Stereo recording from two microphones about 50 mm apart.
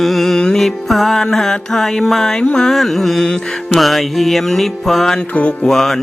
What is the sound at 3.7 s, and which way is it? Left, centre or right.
Mantra, centre.